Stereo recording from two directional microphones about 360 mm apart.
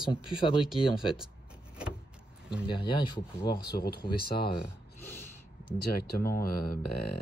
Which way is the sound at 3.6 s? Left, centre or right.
Left.